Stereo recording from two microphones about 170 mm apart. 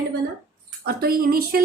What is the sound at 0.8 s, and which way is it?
Speech, 60° right (ahead or behind).